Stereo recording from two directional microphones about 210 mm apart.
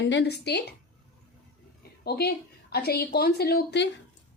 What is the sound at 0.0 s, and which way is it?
Speech, 55° left (ahead or behind).